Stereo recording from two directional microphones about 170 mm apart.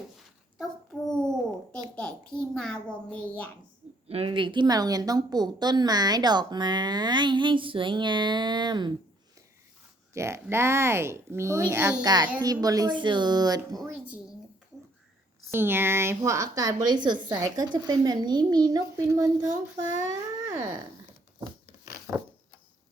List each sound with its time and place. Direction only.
0.6 s a sound: 5° left (ahead or behind)
2.0 s a child's voice: 5° left (ahead or behind)
4.1 s speech: 30° right (ahead or behind)
10.2 s speech: 15° right (ahead or behind)
15.5 s speech: 15° right (ahead or behind)